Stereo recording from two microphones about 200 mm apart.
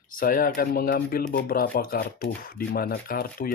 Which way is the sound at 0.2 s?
45° left (ahead or behind).